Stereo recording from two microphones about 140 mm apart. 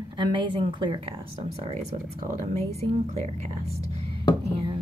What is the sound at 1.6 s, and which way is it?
Speech, 45° right (ahead or behind).